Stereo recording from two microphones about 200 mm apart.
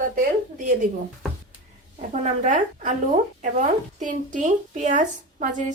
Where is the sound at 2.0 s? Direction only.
40° right (ahead or behind).